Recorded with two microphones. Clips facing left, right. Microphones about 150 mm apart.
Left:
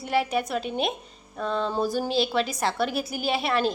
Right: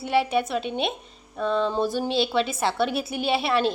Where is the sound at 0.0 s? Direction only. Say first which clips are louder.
Right 2 dB; 30° right (ahead or behind).